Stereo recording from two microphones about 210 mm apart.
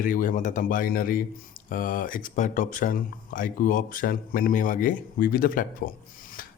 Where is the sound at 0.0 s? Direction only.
40° left (ahead or behind).